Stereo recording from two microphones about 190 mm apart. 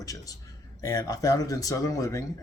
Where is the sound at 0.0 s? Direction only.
20° left (ahead or behind).